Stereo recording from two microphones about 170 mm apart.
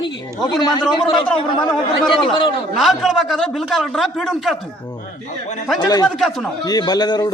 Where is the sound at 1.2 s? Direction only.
5° left (ahead or behind).